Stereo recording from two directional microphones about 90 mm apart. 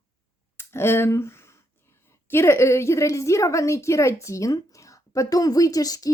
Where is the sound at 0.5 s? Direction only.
25° left (ahead or behind).